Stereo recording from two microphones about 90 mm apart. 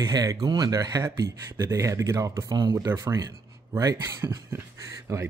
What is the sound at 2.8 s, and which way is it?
Speech, 30° right (ahead or behind).